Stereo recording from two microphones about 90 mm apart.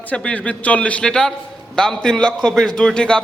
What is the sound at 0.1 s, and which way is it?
A man's voice, 15° left (ahead or behind).